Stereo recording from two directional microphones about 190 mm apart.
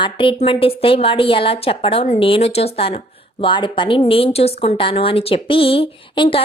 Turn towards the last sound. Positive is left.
turn(degrees=25)  # may be behind; listen again after turning